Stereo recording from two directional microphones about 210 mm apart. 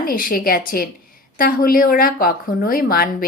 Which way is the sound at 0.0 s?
45° left (ahead or behind).